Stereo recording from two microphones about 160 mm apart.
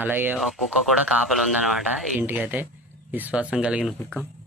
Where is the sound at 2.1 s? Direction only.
10° right (ahead or behind).